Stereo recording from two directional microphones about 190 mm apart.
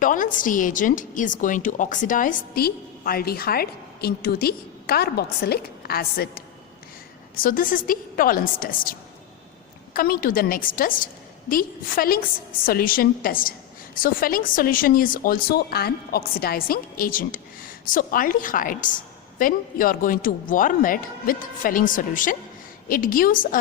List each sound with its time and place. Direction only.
0.0 s a woman's voice: 45° left (ahead or behind)
7.3 s a woman's voice: 45° left (ahead or behind)